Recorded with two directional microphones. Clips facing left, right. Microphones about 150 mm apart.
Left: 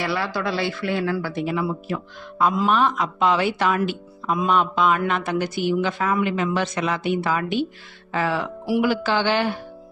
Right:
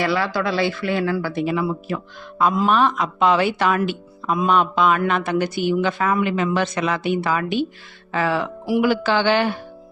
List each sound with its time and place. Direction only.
0.0 s speech: 90° right
2.6 s a man's voice: 65° right (ahead or behind); by 7.4 s 90° right
8.1 s a man's voice: 75° right (ahead or behind)